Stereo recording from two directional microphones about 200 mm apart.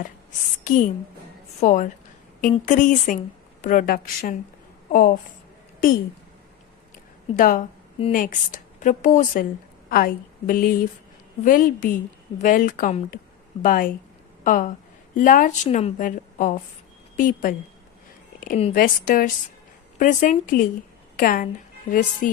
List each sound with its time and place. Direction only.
0.6 s a woman's voice: 40° left (ahead or behind)
7.3 s a woman's voice: 45° left (ahead or behind)
18.3 s a sound: 45° left (ahead or behind)
18.6 s a woman's voice: 45° left (ahead or behind)